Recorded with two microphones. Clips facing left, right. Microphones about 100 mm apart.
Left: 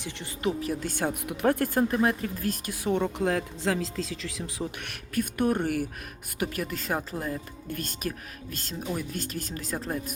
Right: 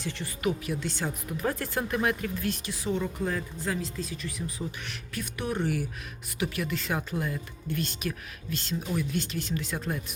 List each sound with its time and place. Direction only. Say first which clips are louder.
0.4 s speech: left 1 dB; 40° left (ahead or behind)
1.9 s speech: left 2 dB; 35° left (ahead or behind); by 4.9 s 90° left
4.9 s speech: left 7 dB; 50° left (ahead or behind)